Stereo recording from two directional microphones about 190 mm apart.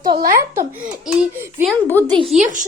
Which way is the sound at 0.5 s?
5° right (ahead or behind).